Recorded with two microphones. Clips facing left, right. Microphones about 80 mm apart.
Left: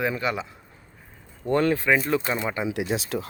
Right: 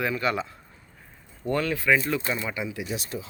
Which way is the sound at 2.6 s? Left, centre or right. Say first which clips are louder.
Left 6 dB; left.